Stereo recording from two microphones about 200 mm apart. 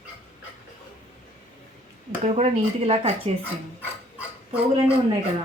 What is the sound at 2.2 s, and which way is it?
Speech, 30° right (ahead or behind).